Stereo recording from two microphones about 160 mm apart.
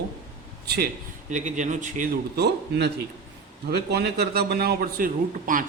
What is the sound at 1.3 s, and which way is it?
Speech, 50° right (ahead or behind).